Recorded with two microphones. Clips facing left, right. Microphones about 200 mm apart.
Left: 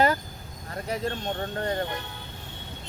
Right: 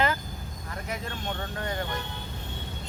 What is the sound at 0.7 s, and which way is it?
Speech, 35° left (ahead or behind).